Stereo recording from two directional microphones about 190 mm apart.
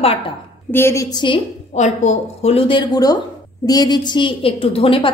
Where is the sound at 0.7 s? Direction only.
10° left (ahead or behind).